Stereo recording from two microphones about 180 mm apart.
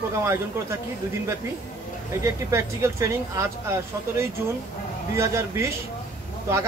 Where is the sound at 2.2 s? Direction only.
15° right (ahead or behind).